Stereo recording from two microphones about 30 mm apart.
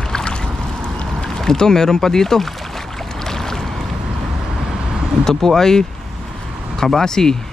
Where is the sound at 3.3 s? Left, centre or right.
Centre.